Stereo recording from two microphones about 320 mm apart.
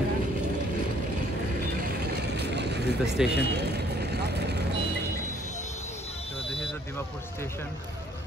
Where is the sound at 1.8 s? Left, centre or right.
Right.